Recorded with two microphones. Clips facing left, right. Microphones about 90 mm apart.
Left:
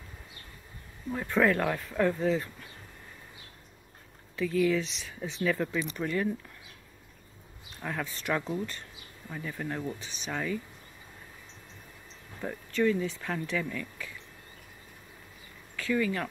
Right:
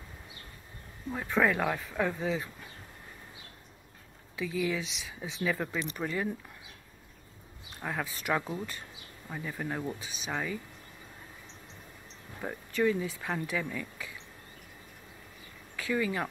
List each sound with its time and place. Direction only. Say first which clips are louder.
1.1 s speech: left 2 dB; 5° right (ahead or behind)
4.4 s speech: left 5 dB; 5° right (ahead or behind)
7.8 s speech: even; 10° right (ahead or behind)
12.4 s speech: left 1 dB; 15° right (ahead or behind)
15.7 s speech: left 2 dB; 15° right (ahead or behind)